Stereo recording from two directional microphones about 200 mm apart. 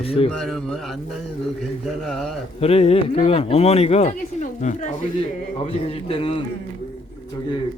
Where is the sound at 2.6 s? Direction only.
30° left (ahead or behind).